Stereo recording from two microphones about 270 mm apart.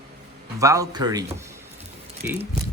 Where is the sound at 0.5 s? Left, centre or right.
Centre.